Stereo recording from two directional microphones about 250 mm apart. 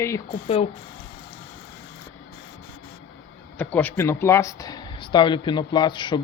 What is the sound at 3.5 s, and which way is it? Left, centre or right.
Speech, centre.